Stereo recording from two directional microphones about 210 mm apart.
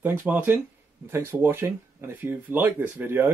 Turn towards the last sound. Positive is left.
turn(degrees=-10)  # may be behind; listen again after turning